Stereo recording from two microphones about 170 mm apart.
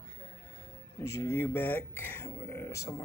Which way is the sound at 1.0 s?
15° left (ahead or behind).